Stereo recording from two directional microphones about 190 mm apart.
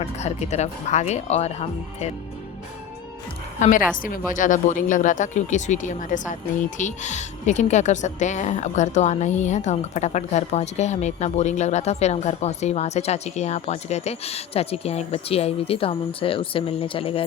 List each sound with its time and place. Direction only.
0.0 s a woman's voice: 35° left (ahead or behind)
3.6 s a woman's voice: 45° left (ahead or behind)